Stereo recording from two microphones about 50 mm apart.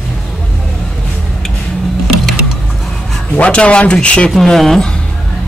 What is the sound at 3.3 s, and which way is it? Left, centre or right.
Speech, left.